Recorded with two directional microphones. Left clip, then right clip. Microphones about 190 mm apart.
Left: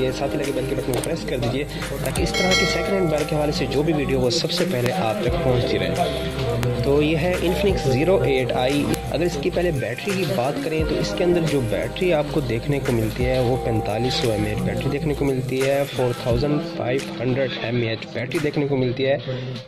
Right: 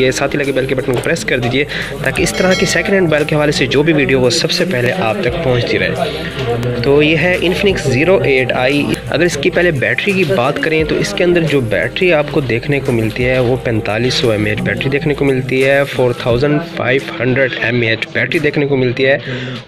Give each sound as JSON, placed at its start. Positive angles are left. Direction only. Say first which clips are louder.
{"t": 1.0, "sound": "speech", "louder": "right 10 dB", "side_deg": 0}
{"t": 6.9, "sound": "speech", "louder": "right 9 dB", "side_deg": 5}